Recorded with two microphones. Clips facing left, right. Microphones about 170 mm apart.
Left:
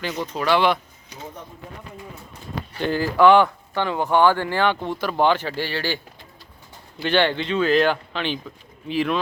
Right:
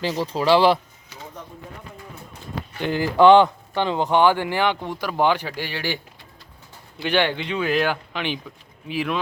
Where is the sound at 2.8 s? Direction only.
15° right (ahead or behind).